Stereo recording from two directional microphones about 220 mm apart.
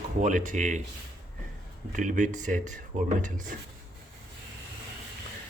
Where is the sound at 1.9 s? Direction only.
35° right (ahead or behind).